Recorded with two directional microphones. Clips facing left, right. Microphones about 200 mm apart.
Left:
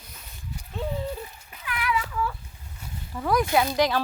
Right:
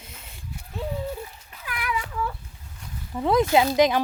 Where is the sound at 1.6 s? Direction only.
40° right (ahead or behind).